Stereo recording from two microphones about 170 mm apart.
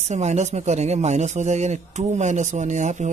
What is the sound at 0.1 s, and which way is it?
A man's voice, 40° right (ahead or behind).